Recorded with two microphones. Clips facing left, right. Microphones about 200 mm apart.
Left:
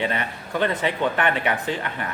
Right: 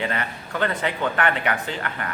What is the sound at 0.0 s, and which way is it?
Speech, 20° left (ahead or behind).